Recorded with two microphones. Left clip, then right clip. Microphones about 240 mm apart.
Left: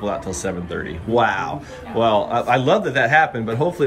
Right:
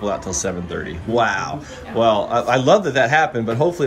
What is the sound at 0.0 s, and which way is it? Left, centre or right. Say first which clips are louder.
Speech: right 2 dB; centre.